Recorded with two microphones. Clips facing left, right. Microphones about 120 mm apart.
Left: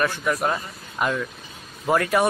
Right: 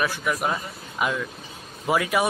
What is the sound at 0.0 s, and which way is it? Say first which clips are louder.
A man's voice: left 2 dB; 5° right (ahead or behind).